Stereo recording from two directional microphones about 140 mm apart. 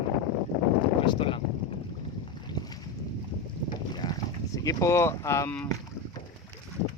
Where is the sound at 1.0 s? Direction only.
35° left (ahead or behind).